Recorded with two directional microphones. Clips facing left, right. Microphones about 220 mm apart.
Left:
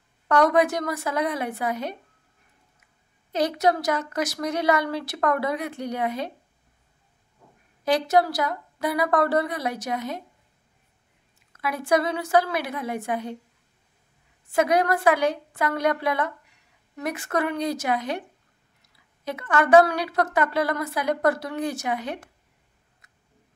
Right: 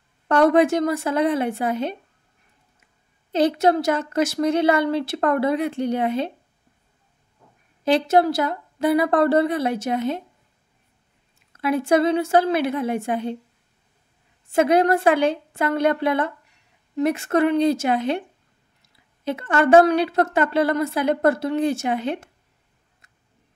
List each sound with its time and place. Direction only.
0.3 s a woman's voice: 25° right (ahead or behind)
3.3 s a woman's voice: 25° right (ahead or behind)
7.8 s a woman's voice: 25° right (ahead or behind)
11.5 s a woman's voice: 25° right (ahead or behind)
14.5 s a woman's voice: 25° right (ahead or behind)
19.2 s a woman's voice: 25° right (ahead or behind)